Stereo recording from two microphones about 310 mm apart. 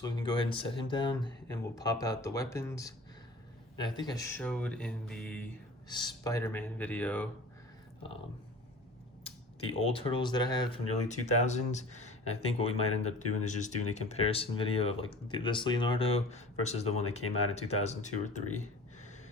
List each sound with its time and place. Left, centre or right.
0.0 s speech: centre
5.9 s speech: centre
9.2 s speech: centre